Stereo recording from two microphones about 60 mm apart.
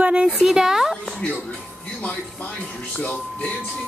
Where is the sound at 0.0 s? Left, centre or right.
Centre.